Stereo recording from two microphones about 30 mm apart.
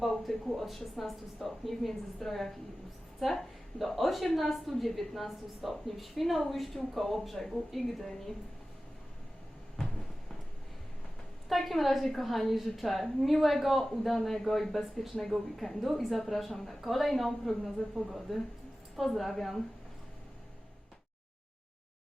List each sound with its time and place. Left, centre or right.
0.0 s a woman's voice: centre
3.2 s a woman's voice: centre
11.4 s a woman's voice: centre
14.2 s a woman's voice: centre
14.4 s a woman's voice: centre